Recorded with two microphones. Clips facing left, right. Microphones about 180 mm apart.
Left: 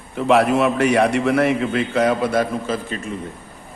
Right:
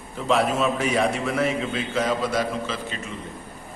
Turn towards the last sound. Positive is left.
turn(degrees=50)  # may be behind; listen again after turning